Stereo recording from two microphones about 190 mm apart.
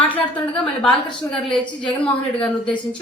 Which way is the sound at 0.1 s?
5° left (ahead or behind).